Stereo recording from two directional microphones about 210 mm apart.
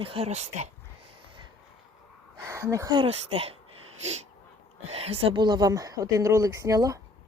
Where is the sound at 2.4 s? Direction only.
15° right (ahead or behind); by 3.5 s 30° right (ahead or behind).